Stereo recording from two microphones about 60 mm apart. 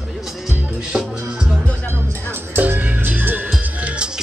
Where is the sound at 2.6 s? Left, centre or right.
Right.